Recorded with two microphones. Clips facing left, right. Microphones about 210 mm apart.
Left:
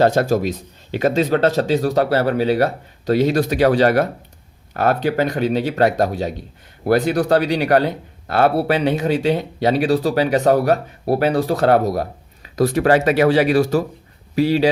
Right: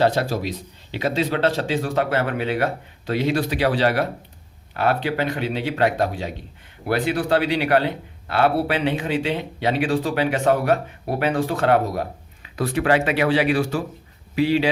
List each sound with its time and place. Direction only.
0.0 s speech: 45° left (ahead or behind)